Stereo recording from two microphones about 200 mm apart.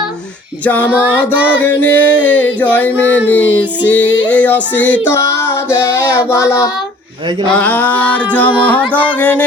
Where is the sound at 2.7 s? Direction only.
10° left (ahead or behind).